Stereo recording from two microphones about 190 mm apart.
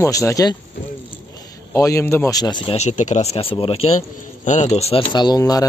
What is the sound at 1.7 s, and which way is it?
Speech, 15° left (ahead or behind).